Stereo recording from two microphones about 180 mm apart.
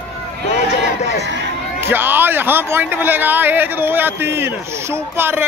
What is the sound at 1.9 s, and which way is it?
Speech, 10° right (ahead or behind).